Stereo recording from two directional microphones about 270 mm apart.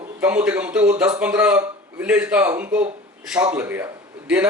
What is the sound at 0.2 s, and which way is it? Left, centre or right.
Speech, centre.